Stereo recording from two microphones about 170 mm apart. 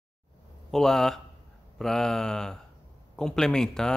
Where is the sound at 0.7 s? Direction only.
Centre (ahead or behind).